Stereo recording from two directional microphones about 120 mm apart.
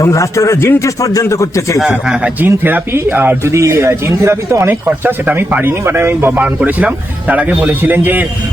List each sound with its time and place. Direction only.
0.0 s a man's voice: 25° left (ahead or behind)
1.8 s a man's voice: 5° right (ahead or behind)